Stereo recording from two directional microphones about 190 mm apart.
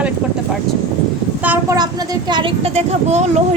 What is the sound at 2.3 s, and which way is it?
Speech, 30° right (ahead or behind).